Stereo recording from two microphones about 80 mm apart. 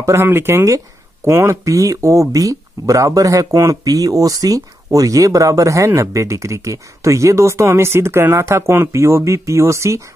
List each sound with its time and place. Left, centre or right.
0.0 s speech: right